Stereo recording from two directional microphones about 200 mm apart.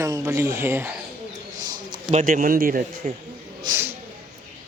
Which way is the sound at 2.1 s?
40° right (ahead or behind).